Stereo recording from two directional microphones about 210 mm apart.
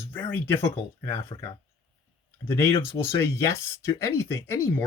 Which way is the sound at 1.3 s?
25° left (ahead or behind).